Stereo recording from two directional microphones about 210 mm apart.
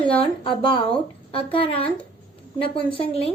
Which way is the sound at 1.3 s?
25° left (ahead or behind).